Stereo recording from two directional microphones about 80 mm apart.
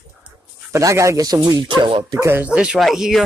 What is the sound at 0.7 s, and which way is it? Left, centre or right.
Speech, right.